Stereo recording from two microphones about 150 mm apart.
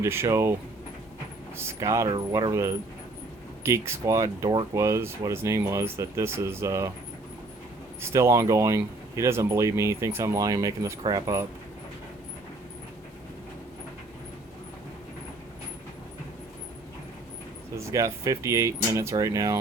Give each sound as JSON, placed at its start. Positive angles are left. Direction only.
{"t": 0.0, "sound": "speech", "side_deg": -15}
{"t": 1.5, "sound": "speech", "side_deg": -20}
{"t": 8.1, "sound": "speech", "side_deg": -20}
{"t": 17.7, "sound": "speech", "side_deg": -20}